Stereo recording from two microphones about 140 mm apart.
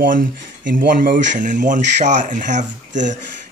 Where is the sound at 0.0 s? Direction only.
80° right.